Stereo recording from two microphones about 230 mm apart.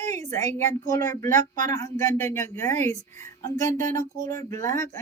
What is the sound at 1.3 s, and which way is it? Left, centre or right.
Speech, right.